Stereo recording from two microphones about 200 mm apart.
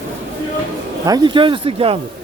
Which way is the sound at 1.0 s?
20° right (ahead or behind).